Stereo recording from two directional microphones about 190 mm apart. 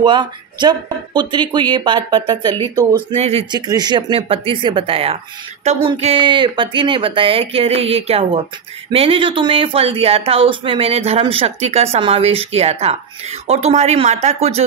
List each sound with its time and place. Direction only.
0.0 s speech: 25° right (ahead or behind)
3.2 s speech: 30° right (ahead or behind)
3.6 s speech: 20° right (ahead or behind)